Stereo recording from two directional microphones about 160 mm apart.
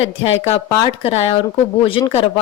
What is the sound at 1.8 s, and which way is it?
Speech, 35° left (ahead or behind).